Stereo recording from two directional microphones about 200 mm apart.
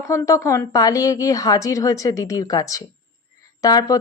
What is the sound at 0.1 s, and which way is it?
A woman's voice, 15° left (ahead or behind).